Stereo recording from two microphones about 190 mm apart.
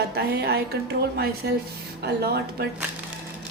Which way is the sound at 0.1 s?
55° right (ahead or behind).